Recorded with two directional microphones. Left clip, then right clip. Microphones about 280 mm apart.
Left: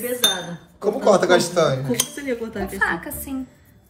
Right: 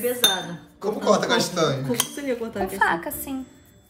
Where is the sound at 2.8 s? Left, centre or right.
Right.